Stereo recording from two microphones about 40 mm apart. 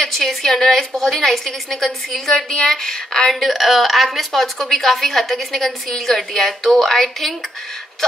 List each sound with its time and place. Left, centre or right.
0.0 s a woman's voice: centre
3.3 s a woman's voice: centre